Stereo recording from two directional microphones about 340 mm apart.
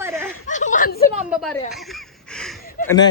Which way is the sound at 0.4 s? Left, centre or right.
Left.